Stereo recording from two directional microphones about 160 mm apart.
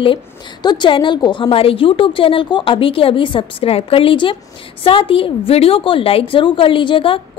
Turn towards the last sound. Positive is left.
turn(degrees=30)  # may be behind; listen again after turning